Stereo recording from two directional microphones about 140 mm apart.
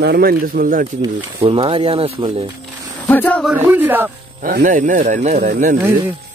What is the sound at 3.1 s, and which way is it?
Speech, 10° left (ahead or behind).